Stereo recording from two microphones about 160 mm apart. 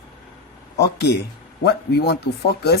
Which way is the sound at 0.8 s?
90° left.